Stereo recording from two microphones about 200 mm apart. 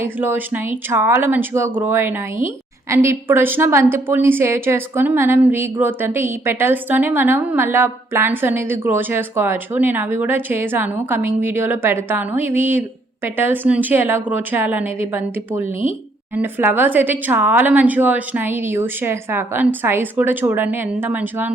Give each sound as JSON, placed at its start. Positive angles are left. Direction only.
{"t": 0.0, "sound": "a woman's voice", "side_deg": -10}